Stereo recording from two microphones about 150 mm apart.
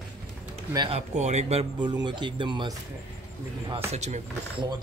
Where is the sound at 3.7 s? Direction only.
50° right (ahead or behind).